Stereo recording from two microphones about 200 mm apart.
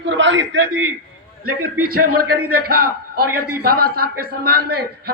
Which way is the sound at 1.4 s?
90° right.